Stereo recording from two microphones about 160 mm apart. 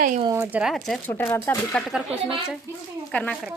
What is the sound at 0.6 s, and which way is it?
Speech, centre (ahead or behind).